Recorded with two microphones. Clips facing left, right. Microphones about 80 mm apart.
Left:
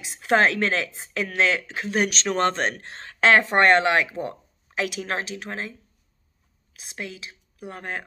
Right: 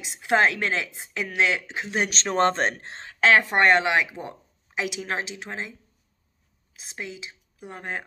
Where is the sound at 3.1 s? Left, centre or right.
Centre.